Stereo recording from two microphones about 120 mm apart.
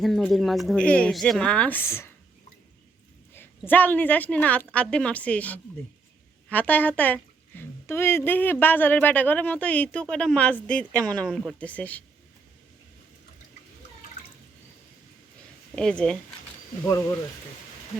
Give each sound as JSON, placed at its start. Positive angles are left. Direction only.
{"t": 0.3, "sound": "a woman's voice", "side_deg": 0}
{"t": 3.7, "sound": "a woman's voice", "side_deg": 15}
{"t": 15.7, "sound": "speech", "side_deg": 5}